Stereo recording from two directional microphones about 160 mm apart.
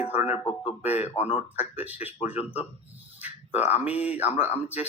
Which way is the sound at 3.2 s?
10° right (ahead or behind).